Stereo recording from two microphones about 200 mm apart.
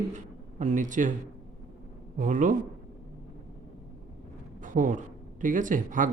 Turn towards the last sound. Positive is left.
turn(degrees=-40)  # may be behind; listen again after turning